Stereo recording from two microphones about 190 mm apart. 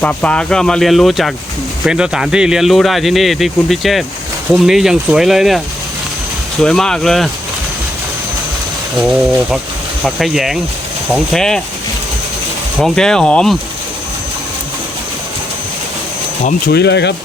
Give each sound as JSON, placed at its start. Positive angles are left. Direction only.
{"t": 0.0, "sound": "speech", "side_deg": 5}
{"t": 10.0, "sound": "speech", "side_deg": 0}
{"t": 12.8, "sound": "speech", "side_deg": 5}
{"t": 16.4, "sound": "speech", "side_deg": 45}
{"t": 16.7, "sound": "speech", "side_deg": 65}